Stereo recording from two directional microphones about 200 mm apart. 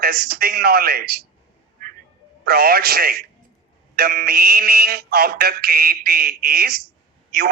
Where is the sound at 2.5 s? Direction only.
50° right (ahead or behind).